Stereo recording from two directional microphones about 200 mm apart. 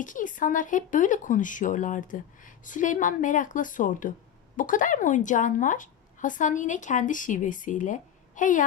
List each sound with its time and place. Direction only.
0.0 s speech: 40° left (ahead or behind)